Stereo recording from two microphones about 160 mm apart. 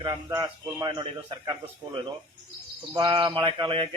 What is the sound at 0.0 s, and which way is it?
A man's voice, 30° right (ahead or behind).